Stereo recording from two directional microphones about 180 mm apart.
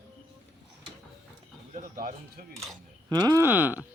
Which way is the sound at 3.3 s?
10° right (ahead or behind).